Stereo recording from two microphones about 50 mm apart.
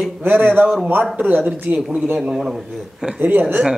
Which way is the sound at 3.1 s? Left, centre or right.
Right.